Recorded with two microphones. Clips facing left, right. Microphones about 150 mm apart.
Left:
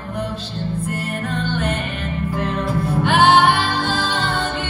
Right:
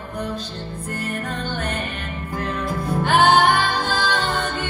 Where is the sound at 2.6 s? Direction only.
40° right (ahead or behind).